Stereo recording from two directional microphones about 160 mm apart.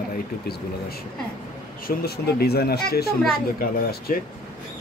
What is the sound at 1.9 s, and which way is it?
Speech, 80° left.